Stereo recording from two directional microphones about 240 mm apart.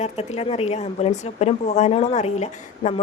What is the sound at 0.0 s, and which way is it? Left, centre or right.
Speech, left.